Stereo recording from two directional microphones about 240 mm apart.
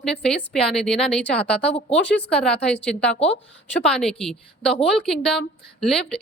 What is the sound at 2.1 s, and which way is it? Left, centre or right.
Speech, centre.